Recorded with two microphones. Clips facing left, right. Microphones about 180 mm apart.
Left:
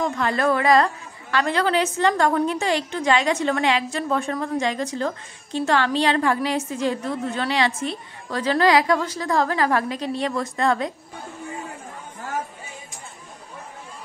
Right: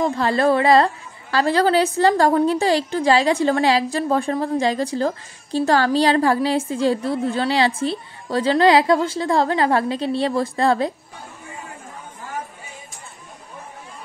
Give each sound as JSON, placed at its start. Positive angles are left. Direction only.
{"t": 0.0, "sound": "a woman's voice", "side_deg": -30}